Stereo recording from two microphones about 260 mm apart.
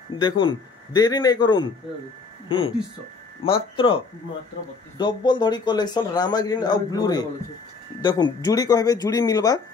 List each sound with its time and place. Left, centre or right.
0.2 s a man's voice: centre